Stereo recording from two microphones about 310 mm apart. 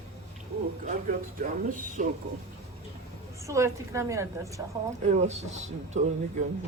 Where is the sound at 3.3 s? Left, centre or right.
Centre.